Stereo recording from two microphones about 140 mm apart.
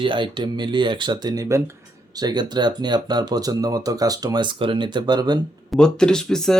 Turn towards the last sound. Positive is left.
turn(degrees=5)  # may be behind; listen again after turning